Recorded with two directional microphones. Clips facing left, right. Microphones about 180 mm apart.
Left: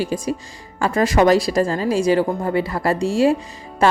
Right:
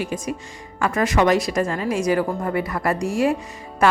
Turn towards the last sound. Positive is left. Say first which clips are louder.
# left 1 dB
turn(degrees=30)  # may be behind; listen again after turning